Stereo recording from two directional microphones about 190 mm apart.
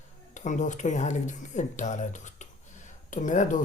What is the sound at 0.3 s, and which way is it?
Speech, 40° left (ahead or behind).